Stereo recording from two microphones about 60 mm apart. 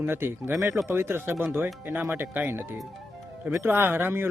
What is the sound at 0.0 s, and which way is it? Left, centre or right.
Speech, right.